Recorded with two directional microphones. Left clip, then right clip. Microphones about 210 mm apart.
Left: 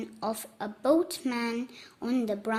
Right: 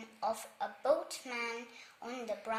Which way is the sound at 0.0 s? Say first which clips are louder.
Left 3 dB; 45° left (ahead or behind).